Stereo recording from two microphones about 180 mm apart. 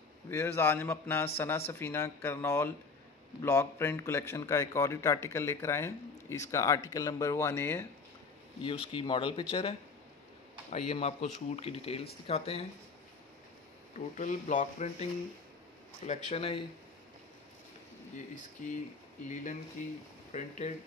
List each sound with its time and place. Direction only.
0.3 s a man's voice: 15° left (ahead or behind)
8.6 s speech: 30° left (ahead or behind)
13.9 s speech: 40° left (ahead or behind)
16.1 s speech: 35° left (ahead or behind)
18.6 s speech: 45° left (ahead or behind)